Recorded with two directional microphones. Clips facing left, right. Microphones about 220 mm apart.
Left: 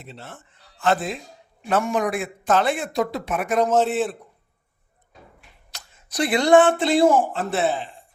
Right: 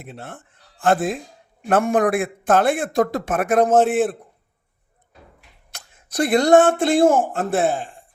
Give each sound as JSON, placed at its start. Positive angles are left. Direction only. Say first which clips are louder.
{"t": 0.0, "sound": "a man's voice", "louder": "right 4 dB", "side_deg": -55}
{"t": 5.7, "sound": "speech", "louder": "right 4 dB", "side_deg": -50}